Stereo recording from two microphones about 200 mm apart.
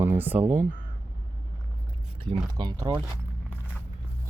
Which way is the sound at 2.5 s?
25° right (ahead or behind).